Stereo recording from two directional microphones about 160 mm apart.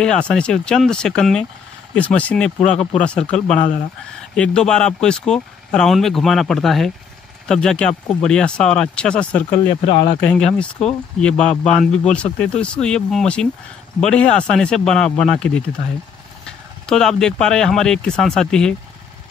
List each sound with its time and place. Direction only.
0.0 s speech: 5° left (ahead or behind)
9.8 s speech: 35° left (ahead or behind)
10.4 s speech: 5° left (ahead or behind)
16.8 s speech: 5° left (ahead or behind)